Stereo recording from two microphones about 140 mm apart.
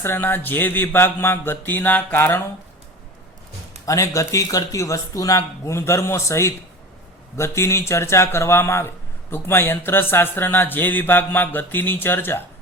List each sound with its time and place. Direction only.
0.0 s speech: 15° left (ahead or behind)
3.8 s speech: 20° left (ahead or behind)